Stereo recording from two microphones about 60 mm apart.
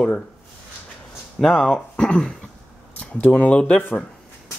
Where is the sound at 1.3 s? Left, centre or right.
Centre.